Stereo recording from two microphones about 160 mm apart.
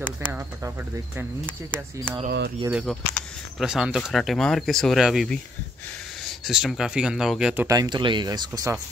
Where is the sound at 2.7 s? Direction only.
5° right (ahead or behind).